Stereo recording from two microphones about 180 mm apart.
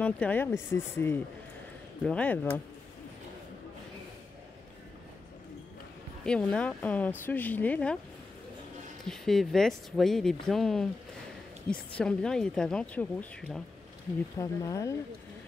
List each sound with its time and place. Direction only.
0.0 s speech: 10° left (ahead or behind)
6.2 s speech: 5° left (ahead or behind)
9.0 s speech: centre (ahead or behind)
14.4 s speech: 20° left (ahead or behind)